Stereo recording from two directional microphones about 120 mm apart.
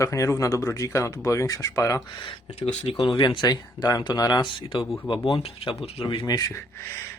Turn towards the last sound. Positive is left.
turn(degrees=25)  # may be behind; listen again after turning